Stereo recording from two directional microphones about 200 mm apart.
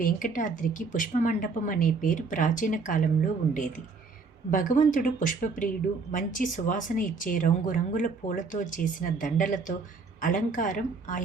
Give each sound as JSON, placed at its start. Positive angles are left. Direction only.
{"t": 0.0, "sound": "speech", "side_deg": 40}